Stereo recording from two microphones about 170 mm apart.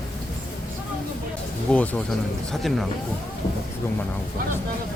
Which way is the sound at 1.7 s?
5° left (ahead or behind).